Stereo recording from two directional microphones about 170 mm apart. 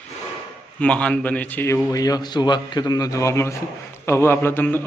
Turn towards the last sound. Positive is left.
turn(degrees=10)  # may be behind; listen again after turning